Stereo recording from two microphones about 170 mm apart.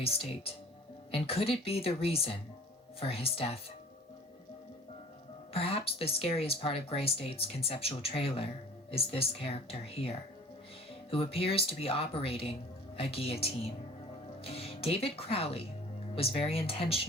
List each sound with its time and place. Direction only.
0.0 s speech: 35° left (ahead or behind)
5.5 s speech: 35° left (ahead or behind)